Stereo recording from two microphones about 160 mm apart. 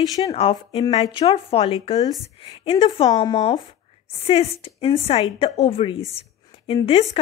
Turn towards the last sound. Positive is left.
turn(degrees=40)  # may be behind; listen again after turning